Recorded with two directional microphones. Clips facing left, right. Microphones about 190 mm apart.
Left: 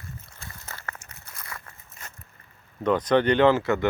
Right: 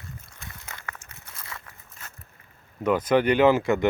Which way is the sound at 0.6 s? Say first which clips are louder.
Left 2 dB; 15° right (ahead or behind).